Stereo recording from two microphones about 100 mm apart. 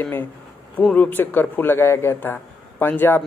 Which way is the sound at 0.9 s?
15° left (ahead or behind).